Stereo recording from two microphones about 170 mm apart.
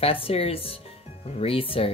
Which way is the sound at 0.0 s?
35° left (ahead or behind).